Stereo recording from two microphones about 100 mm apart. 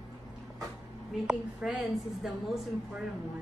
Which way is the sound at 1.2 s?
5° right (ahead or behind).